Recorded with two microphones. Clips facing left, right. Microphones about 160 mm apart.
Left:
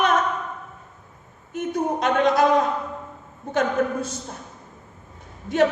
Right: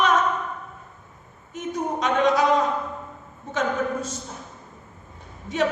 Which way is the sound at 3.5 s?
60° left (ahead or behind).